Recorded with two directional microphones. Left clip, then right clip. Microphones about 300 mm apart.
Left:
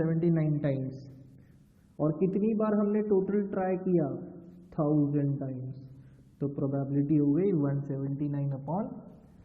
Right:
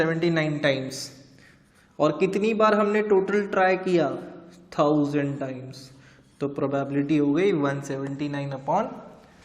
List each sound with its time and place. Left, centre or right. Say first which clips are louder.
0.0 s a man's voice: right 7 dB; centre
2.0 s a man's voice: right 7 dB; centre